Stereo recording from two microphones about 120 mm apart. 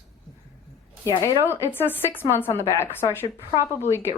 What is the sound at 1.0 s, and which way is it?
Speech, 25° left (ahead or behind).